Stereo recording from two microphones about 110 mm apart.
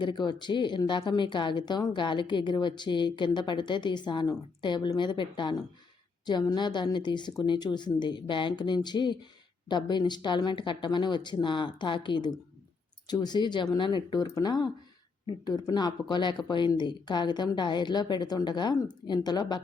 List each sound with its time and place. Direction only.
0.0 s a woman's voice: 40° left (ahead or behind)